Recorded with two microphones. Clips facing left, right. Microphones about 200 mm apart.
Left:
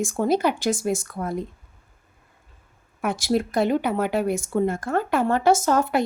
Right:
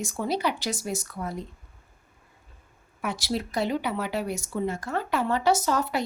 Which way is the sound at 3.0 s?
50° left (ahead or behind).